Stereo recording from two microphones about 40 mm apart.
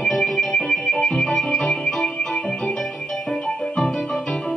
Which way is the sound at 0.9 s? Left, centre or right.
Centre.